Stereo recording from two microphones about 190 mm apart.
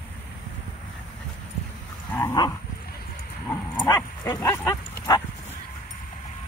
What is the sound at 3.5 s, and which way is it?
Dog, 15° left (ahead or behind).